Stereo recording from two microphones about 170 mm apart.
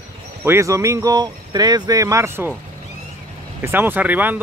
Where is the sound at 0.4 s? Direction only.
15° right (ahead or behind).